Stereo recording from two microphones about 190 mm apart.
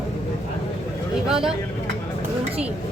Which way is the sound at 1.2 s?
5° right (ahead or behind).